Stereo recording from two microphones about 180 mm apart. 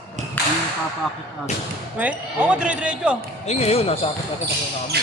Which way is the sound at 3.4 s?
35° left (ahead or behind).